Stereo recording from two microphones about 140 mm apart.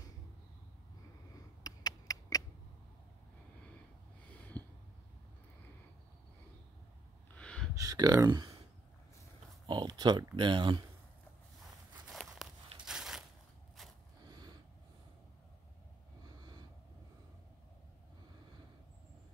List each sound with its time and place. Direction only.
1.6 s a sound: 25° left (ahead or behind)
7.3 s a sound: 5° left (ahead or behind)
7.7 s speech: 25° right (ahead or behind)
9.7 s speech: 30° right (ahead or behind)
12.1 s walk: centre (ahead or behind)
12.8 s crushing: 5° right (ahead or behind)